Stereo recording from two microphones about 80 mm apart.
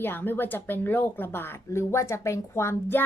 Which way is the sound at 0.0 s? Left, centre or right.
Left.